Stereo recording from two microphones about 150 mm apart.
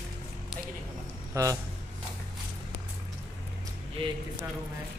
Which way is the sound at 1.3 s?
20° right (ahead or behind).